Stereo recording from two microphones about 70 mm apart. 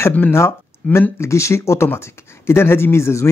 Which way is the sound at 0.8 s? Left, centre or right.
Left.